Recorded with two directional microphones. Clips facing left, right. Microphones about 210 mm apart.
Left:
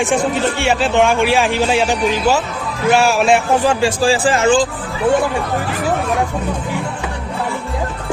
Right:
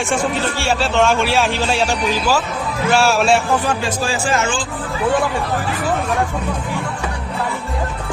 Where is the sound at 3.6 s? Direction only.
30° left (ahead or behind).